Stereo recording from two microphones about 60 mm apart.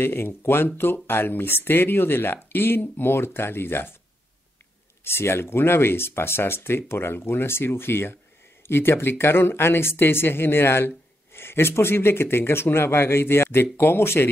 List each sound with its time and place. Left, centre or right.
0.0 s speech: left
5.0 s speech: left